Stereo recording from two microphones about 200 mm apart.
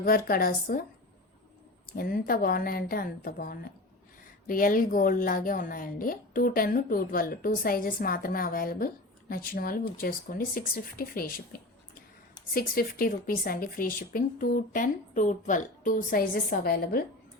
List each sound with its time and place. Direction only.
0.0 s a woman's voice: 45° left (ahead or behind)
1.9 s a woman's voice: 45° left (ahead or behind)